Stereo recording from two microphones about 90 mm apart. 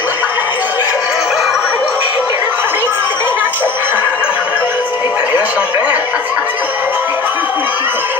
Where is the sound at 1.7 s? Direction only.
15° right (ahead or behind).